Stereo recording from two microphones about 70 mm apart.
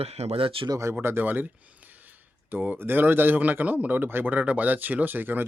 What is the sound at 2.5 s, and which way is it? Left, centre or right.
A man's voice, right.